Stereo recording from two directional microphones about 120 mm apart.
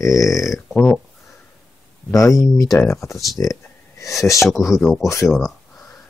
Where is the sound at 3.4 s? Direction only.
25° left (ahead or behind).